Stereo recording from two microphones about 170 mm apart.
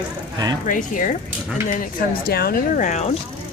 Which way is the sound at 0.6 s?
50° left (ahead or behind).